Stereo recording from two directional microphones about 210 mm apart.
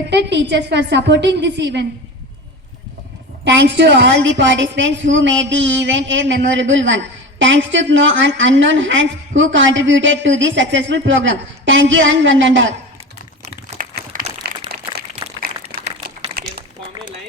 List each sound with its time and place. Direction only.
0.1 s a man's voice: 55° right (ahead or behind)
3.4 s a man's voice: 55° right (ahead or behind)
13.9 s a sound: 45° right (ahead or behind)
15.8 s crumpling: 50° right (ahead or behind)